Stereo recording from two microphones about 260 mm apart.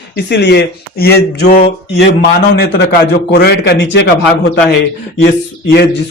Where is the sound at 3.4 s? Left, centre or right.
Left.